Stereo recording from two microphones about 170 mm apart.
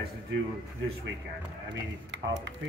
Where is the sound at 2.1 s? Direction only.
90° right.